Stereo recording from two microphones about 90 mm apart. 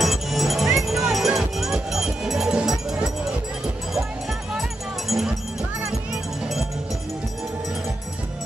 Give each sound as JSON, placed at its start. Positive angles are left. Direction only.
{"t": 0.0, "sound": "music", "side_deg": 0}
{"t": 0.7, "sound": "a sound", "side_deg": -5}
{"t": 4.6, "sound": "music", "side_deg": -5}